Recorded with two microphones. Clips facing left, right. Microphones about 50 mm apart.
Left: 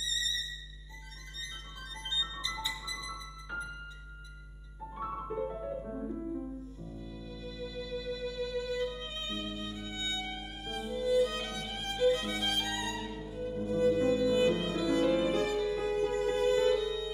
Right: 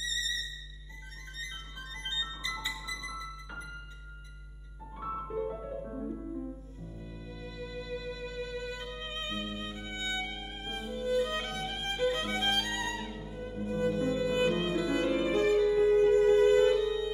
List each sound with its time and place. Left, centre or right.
0.0 s music: right
2.8 s music: right
4.9 s music: centre
7.6 s music: right